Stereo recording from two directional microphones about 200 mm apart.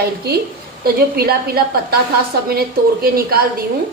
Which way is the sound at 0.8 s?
50° right (ahead or behind).